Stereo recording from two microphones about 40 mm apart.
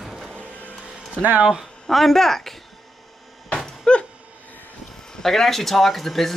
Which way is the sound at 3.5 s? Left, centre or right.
Left.